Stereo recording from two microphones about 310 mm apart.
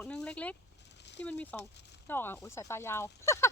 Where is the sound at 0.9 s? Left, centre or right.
Left.